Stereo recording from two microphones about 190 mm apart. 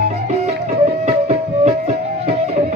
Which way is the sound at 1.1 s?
35° right (ahead or behind).